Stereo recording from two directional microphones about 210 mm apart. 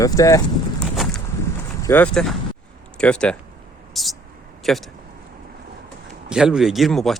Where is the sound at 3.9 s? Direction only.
Centre (ahead or behind).